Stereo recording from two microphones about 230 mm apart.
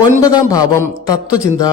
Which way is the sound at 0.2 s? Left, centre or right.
Centre.